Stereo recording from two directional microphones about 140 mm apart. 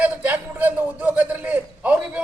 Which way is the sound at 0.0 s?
10° right (ahead or behind).